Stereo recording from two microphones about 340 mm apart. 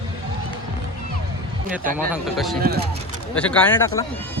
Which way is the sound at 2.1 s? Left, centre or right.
Centre.